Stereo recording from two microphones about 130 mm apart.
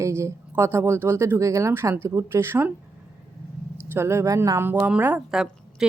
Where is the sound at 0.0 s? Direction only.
20° right (ahead or behind).